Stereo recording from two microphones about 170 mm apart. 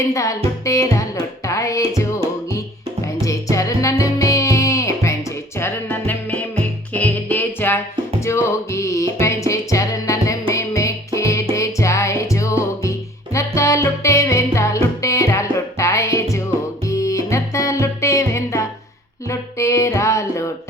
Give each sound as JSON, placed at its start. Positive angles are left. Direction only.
{"t": 0.1, "sound": "speech", "side_deg": 20}
{"t": 3.0, "sound": "music", "side_deg": 20}